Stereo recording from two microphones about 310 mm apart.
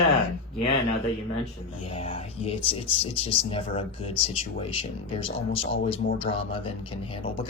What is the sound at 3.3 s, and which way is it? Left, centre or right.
Speech, centre.